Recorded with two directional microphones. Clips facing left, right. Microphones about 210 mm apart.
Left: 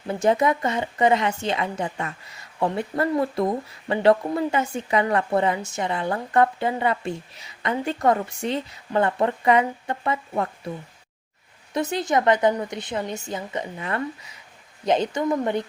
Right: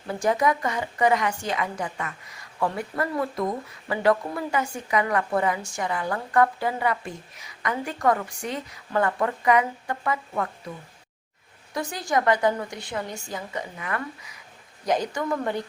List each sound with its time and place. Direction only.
0.1 s a woman's voice: 25° left (ahead or behind)
11.7 s a woman's voice: 25° left (ahead or behind)